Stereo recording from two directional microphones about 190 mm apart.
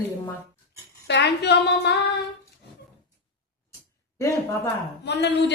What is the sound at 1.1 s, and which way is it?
Speech, 65° left (ahead or behind).